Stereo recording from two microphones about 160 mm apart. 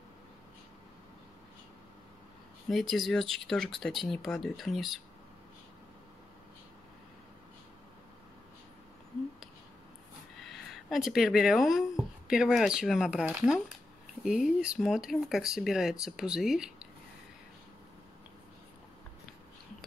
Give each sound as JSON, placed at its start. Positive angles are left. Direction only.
{"t": 2.7, "sound": "speech", "side_deg": 0}
{"t": 10.4, "sound": "speech", "side_deg": 0}